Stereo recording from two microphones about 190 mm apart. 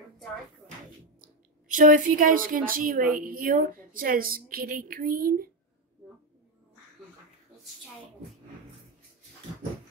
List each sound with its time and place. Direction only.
1.7 s a woman's voice: 45° right (ahead or behind)